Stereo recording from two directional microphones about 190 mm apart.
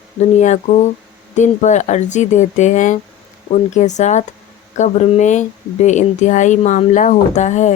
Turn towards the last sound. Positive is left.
turn(degrees=40)  # may be behind; listen again after turning